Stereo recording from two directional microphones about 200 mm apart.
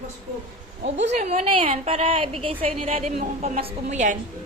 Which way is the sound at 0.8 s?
35° right (ahead or behind).